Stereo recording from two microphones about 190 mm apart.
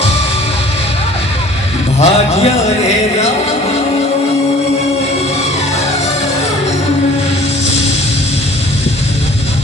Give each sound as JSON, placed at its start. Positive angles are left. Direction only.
{"t": 2.0, "sound": "speech", "side_deg": 35}